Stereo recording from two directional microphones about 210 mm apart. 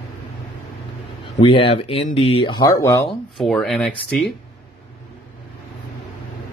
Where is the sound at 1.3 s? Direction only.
25° left (ahead or behind).